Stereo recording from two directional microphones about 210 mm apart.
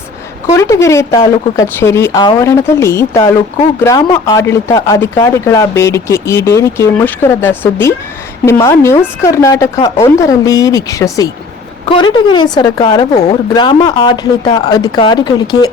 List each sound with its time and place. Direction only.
0.5 s speech: 15° left (ahead or behind)